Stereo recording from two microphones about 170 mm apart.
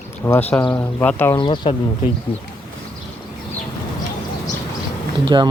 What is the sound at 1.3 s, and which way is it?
Speech, 30° left (ahead or behind).